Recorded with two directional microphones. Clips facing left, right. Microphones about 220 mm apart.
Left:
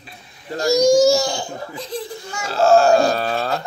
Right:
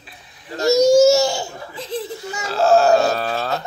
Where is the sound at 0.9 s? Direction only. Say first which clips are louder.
Right 2 dB; 25° right (ahead or behind).